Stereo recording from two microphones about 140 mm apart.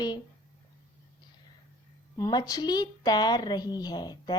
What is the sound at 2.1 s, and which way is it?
Speech, 25° left (ahead or behind).